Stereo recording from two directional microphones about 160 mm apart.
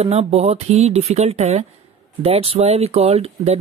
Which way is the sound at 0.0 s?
40° right (ahead or behind).